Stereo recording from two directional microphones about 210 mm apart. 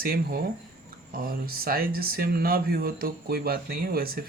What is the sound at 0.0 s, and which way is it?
Speech, 45° right (ahead or behind).